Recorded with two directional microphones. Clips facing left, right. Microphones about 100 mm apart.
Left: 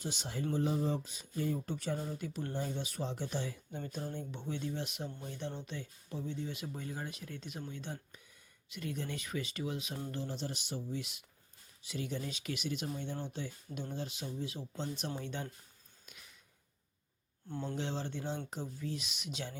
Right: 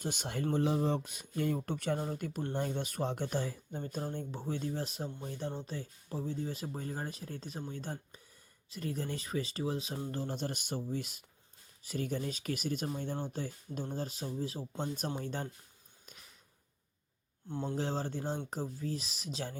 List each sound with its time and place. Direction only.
0.0 s speech: 55° right (ahead or behind)
0.5 s speech: 70° right (ahead or behind); by 10.2 s 35° right (ahead or behind)
10.2 s speech: 50° right (ahead or behind)
17.5 s speech: 20° right (ahead or behind)
17.7 s speech: 40° right (ahead or behind)